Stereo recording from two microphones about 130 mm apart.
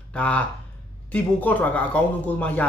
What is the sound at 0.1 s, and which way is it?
A man's voice, 10° left (ahead or behind).